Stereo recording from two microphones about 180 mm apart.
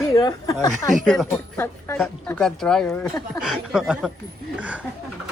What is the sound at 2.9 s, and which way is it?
Speech, 15° left (ahead or behind).